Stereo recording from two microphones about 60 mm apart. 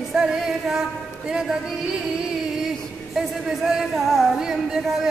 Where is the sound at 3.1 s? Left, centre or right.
Centre.